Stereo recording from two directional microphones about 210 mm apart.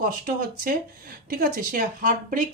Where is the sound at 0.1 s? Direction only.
40° right (ahead or behind).